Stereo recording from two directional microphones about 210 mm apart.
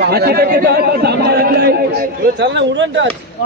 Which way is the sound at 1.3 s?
50° right (ahead or behind).